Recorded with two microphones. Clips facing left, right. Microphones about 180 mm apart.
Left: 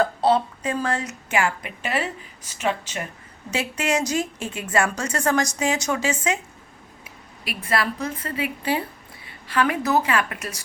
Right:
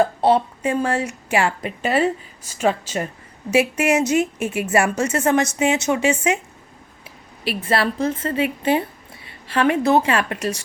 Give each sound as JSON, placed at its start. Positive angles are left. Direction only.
{"t": 0.0, "sound": "a woman's voice", "side_deg": -30}
{"t": 7.4, "sound": "a woman's voice", "side_deg": -30}